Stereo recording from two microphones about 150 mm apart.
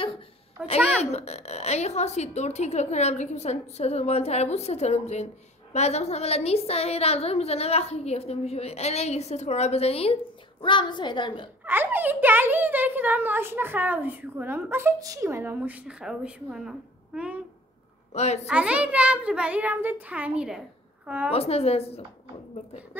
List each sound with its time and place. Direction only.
0.8 s a woman's voice: 45° left (ahead or behind)
11.6 s a child's voice: 15° right (ahead or behind)
18.1 s a woman's voice: 45° left (ahead or behind)
18.5 s a child's voice: 10° right (ahead or behind)
21.3 s a woman's voice: 40° left (ahead or behind)